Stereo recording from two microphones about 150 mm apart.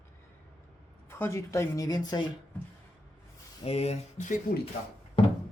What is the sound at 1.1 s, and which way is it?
Speech, 15° left (ahead or behind).